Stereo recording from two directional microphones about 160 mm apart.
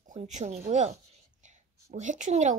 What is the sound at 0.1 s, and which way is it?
Speech, 45° right (ahead or behind).